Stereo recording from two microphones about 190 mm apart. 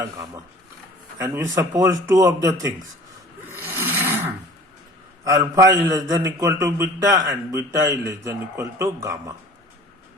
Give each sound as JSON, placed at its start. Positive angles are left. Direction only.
{"t": 0.0, "sound": "a man's voice", "side_deg": -15}
{"t": 3.4, "sound": "roar", "side_deg": -10}
{"t": 5.2, "sound": "a man's voice", "side_deg": -15}